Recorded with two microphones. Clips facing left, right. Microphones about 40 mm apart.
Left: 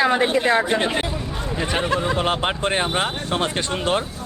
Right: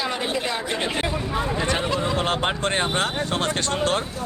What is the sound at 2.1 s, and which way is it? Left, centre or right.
Speech, centre.